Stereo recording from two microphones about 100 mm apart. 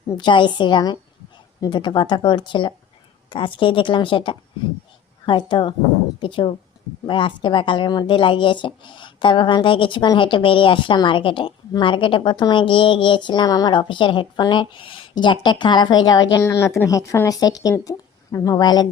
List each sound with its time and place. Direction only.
0.2 s speech: 50° left (ahead or behind)
15.1 s speech: 50° left (ahead or behind)
16.4 s speech: 25° left (ahead or behind); by 18.9 s 45° left (ahead or behind)